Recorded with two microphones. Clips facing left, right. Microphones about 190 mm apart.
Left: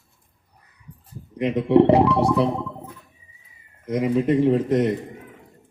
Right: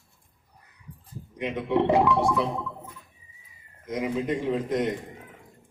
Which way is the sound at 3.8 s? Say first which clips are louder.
Left 7 dB; 40° left (ahead or behind).